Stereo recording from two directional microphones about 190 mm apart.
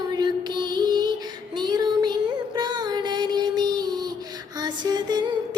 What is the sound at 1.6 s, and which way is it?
Music, 20° right (ahead or behind).